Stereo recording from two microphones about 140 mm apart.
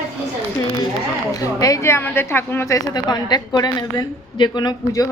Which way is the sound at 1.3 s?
25° left (ahead or behind).